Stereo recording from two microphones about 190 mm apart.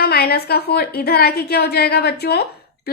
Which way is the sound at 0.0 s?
55° left (ahead or behind).